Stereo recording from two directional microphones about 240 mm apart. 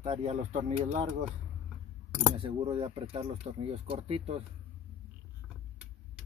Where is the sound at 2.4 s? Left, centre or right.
Right.